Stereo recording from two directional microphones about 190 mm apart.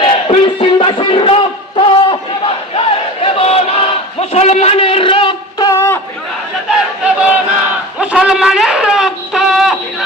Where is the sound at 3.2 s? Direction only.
30° left (ahead or behind).